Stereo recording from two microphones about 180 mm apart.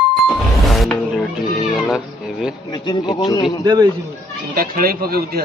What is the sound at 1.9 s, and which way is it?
Cat, 5° right (ahead or behind).